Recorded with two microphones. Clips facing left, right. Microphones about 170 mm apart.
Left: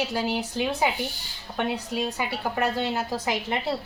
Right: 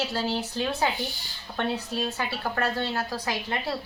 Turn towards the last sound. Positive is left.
turn(degrees=20)  # may be behind; listen again after turning